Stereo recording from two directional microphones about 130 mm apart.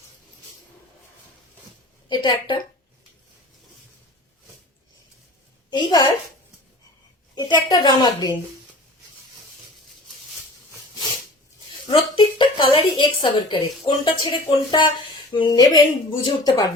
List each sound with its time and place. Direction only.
2.0 s a woman's voice: 35° left (ahead or behind)
5.7 s a woman's voice: 35° left (ahead or behind)
7.3 s a woman's voice: 30° left (ahead or behind)
11.9 s a woman's voice: 40° left (ahead or behind)